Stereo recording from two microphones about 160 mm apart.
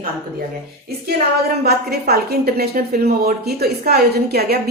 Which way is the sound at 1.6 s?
80° right.